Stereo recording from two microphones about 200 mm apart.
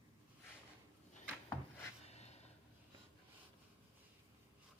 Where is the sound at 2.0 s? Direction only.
35° left (ahead or behind).